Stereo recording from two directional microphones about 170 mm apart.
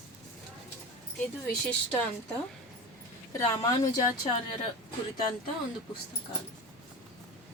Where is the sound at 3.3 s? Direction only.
20° left (ahead or behind).